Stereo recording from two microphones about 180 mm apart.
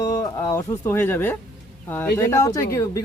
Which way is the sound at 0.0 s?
20° left (ahead or behind).